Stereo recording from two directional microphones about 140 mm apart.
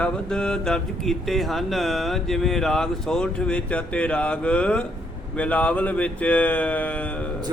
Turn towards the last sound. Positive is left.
turn(degrees=10)  # may be behind; listen again after turning